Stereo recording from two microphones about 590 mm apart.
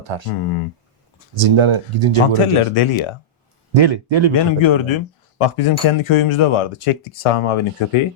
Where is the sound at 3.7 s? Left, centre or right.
Right.